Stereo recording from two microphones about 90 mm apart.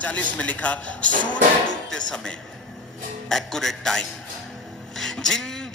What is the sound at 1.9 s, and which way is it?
A man's voice, 10° left (ahead or behind).